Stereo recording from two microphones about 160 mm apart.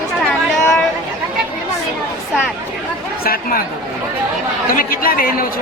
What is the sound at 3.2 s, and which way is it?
Speech, 65° left (ahead or behind).